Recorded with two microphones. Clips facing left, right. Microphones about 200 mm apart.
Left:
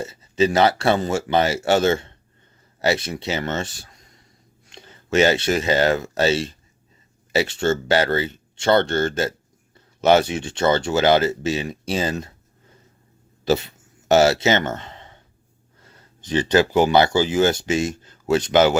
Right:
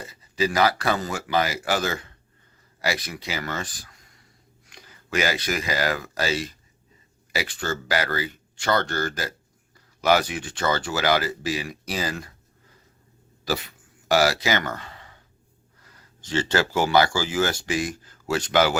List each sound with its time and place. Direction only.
0.0 s speech: 25° left (ahead or behind)
13.4 s a sound: 25° left (ahead or behind)
15.8 s speech: 25° left (ahead or behind)